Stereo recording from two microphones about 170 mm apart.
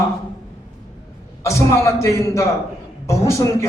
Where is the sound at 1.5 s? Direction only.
15° left (ahead or behind).